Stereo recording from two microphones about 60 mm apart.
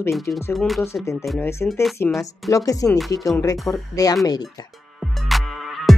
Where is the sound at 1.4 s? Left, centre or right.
Left.